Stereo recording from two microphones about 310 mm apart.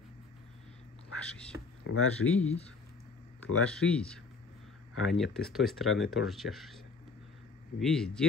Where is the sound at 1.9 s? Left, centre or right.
Left.